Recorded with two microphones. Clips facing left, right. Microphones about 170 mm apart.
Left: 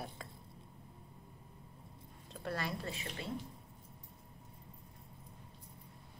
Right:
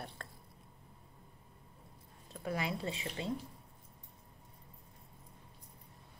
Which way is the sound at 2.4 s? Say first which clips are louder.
Right 3 dB; 15° right (ahead or behind).